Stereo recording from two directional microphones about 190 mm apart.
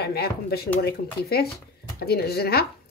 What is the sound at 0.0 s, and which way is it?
Speech, 55° left (ahead or behind).